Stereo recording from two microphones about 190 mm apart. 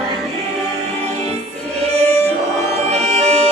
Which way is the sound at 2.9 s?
35° right (ahead or behind).